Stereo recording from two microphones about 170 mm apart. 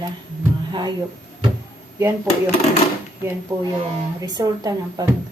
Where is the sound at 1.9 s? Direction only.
15° right (ahead or behind).